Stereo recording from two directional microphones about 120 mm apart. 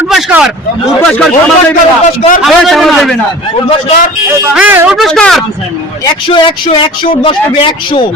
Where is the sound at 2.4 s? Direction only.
Centre (ahead or behind).